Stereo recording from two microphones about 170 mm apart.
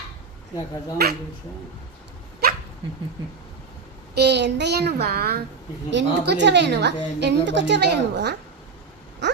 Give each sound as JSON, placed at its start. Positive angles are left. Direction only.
{"t": 1.0, "sound": "a child's voice", "side_deg": -70}
{"t": 2.4, "sound": "dog", "side_deg": -60}
{"t": 4.1, "sound": "a child's voice", "side_deg": -85}
{"t": 5.9, "sound": "a woman's voice", "side_deg": -90}
{"t": 9.2, "sound": "a sound", "side_deg": -90}